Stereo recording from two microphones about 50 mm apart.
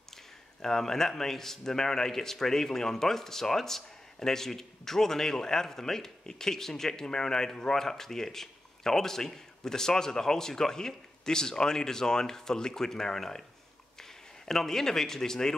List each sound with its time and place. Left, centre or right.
0.6 s a man's voice: centre